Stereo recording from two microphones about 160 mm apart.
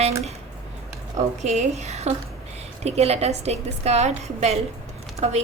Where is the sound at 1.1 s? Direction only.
45° right (ahead or behind).